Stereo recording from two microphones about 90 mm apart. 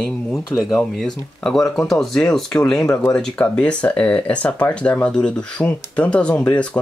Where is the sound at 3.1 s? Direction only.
15° left (ahead or behind).